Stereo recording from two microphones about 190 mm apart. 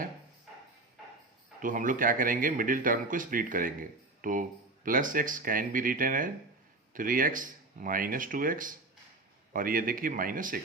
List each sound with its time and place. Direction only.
1.6 s speech: 45° right (ahead or behind)